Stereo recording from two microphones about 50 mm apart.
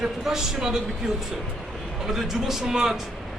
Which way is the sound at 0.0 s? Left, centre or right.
Centre.